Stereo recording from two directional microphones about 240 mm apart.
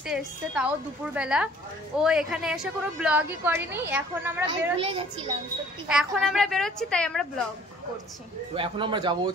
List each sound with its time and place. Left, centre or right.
0.0 s a woman's voice: centre
4.7 s a man's voice: right
5.9 s a woman's voice: centre
8.5 s a man's voice: centre